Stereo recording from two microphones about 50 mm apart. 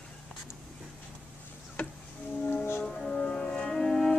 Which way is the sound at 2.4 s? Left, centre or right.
Left.